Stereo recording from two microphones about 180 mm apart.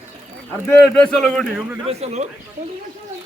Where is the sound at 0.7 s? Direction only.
5° left (ahead or behind).